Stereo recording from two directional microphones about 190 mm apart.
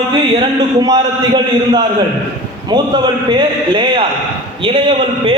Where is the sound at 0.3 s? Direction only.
20° right (ahead or behind).